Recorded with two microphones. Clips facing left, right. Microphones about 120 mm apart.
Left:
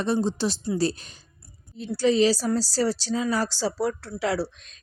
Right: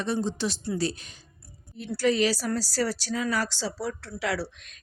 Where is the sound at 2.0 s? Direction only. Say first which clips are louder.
Left 4 dB; 25° left (ahead or behind).